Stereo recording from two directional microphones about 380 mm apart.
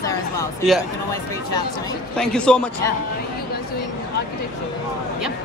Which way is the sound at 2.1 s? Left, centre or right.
Centre.